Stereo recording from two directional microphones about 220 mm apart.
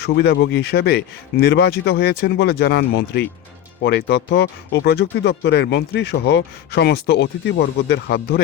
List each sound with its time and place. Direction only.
0.0 s speech: 50° left (ahead or behind)